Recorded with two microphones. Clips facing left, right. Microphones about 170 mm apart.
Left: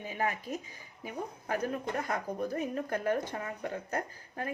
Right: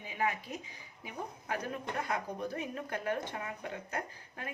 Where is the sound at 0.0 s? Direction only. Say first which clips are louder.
Left 1 dB; 45° left (ahead or behind).